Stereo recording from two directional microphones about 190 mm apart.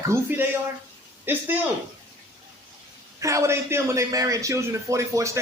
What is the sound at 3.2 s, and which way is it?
A man's voice, 15° right (ahead or behind).